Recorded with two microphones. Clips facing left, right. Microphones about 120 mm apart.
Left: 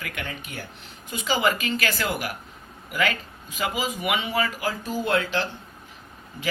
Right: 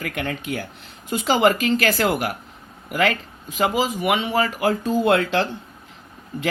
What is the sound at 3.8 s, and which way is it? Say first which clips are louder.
Speech: right 5 dB; 35° right (ahead or behind).